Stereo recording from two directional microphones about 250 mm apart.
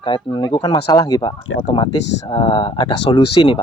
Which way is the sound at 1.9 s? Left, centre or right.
Left.